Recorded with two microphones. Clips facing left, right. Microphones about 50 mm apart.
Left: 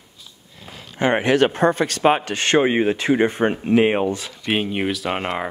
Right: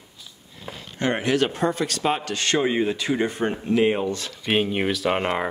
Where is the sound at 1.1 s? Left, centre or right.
Left.